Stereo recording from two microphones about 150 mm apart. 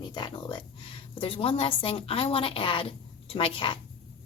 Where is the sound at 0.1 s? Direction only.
30° left (ahead or behind).